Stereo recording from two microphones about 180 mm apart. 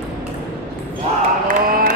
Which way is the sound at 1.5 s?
50° right (ahead or behind).